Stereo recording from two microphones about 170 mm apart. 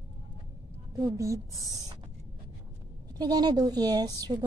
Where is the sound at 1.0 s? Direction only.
20° right (ahead or behind).